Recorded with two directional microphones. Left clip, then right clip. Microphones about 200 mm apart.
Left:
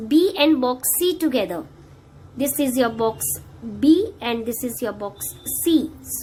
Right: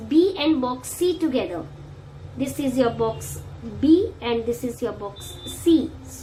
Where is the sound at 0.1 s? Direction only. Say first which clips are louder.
Left 2 dB; 55° left (ahead or behind).